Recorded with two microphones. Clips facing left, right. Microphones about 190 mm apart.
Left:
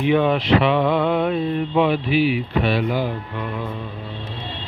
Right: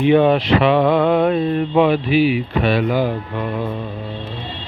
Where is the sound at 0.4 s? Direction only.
90° right.